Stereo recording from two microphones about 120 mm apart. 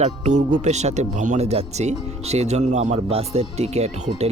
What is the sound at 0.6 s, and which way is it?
Speech, 70° right (ahead or behind).